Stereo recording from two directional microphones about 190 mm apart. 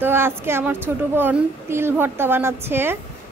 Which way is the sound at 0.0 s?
10° right (ahead or behind).